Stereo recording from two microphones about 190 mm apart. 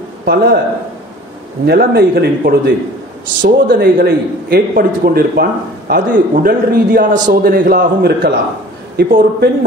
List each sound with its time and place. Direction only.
0.2 s speech: 55° right (ahead or behind)
1.7 s a man's voice: 55° right (ahead or behind)